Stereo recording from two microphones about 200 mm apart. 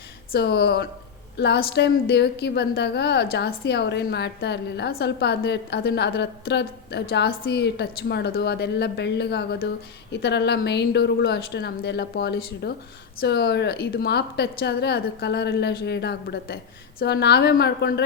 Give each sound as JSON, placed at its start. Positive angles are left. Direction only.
{"t": 0.3, "sound": "a woman's voice", "side_deg": 55}